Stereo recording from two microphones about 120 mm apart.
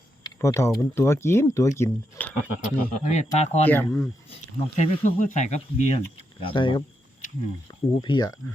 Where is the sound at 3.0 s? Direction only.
75° left (ahead or behind).